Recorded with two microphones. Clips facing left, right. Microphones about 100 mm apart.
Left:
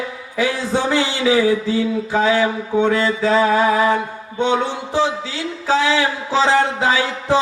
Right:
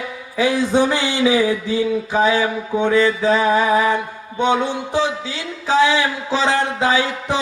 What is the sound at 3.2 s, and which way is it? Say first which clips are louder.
Speech: left 1 dB; 20° right (ahead or behind).